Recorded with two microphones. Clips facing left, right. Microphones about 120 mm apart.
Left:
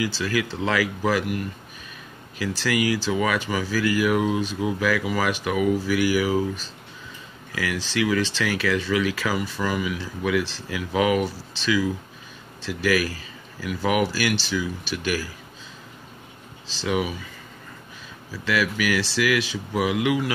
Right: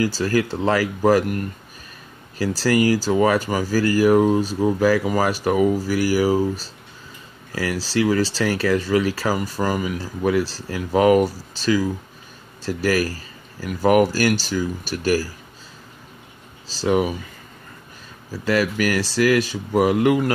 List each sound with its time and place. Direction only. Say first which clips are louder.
0.0 s speech: right 5 dB; 40° right (ahead or behind)
16.6 s speech: right 6 dB; 40° right (ahead or behind)
18.3 s speech: right 4 dB; 40° right (ahead or behind)